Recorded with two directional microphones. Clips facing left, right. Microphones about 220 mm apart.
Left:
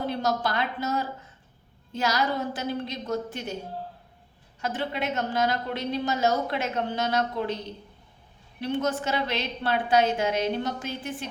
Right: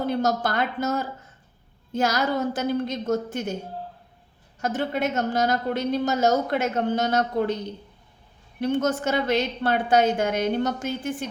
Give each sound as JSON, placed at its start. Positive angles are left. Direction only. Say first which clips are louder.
{"t": 0.0, "sound": "a woman's voice", "louder": "right 4 dB", "side_deg": -45}
{"t": 4.6, "sound": "a woman's voice", "louder": "right 4 dB", "side_deg": -45}
{"t": 8.6, "sound": "a woman's voice", "louder": "right 4 dB", "side_deg": -45}